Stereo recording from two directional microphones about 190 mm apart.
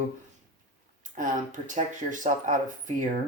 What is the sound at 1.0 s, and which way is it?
Speech, 40° right (ahead or behind).